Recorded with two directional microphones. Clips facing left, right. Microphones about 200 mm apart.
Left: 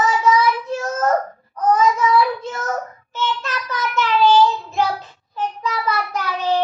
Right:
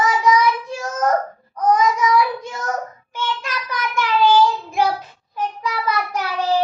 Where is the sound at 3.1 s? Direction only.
10° right (ahead or behind).